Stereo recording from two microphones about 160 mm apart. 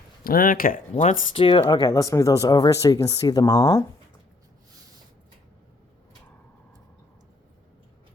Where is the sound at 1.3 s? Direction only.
35° left (ahead or behind).